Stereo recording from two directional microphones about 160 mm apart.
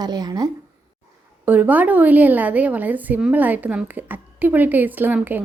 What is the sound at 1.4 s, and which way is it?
A woman's voice, 10° right (ahead or behind).